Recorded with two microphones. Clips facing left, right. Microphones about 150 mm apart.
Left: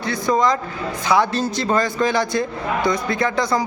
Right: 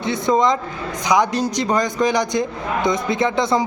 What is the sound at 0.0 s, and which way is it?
A man's voice, 20° right (ahead or behind).